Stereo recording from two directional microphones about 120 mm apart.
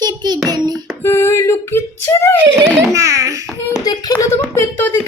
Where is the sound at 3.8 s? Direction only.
35° left (ahead or behind).